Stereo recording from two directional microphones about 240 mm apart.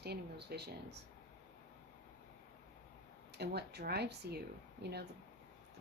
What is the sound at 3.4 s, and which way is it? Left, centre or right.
Speech, right.